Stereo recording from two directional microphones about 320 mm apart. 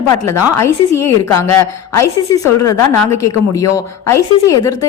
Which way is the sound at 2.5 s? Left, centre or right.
Left.